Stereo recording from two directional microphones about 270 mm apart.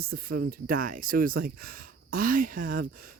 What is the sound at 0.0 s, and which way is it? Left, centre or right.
Speech, right.